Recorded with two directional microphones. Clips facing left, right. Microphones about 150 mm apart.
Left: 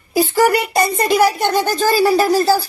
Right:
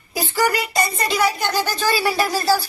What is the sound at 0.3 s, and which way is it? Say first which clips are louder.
A woman's voice: left 4 dB; 55° left (ahead or behind).